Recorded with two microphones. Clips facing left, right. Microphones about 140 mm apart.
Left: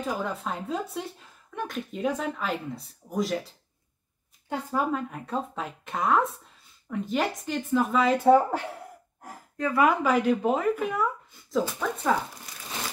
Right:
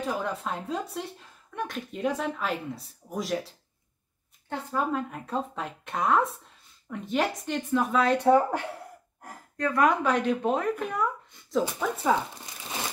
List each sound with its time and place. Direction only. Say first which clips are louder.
0.0 s speech: even; centre (ahead or behind)